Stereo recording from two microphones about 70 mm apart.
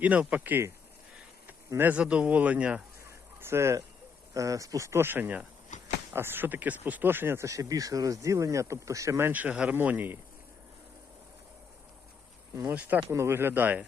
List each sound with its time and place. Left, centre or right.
0.0 s a man's voice: centre
1.8 s a man's voice: centre
3.0 s a sound: right
4.4 s speech: right
9.3 s a man's voice: right
13.1 s speech: right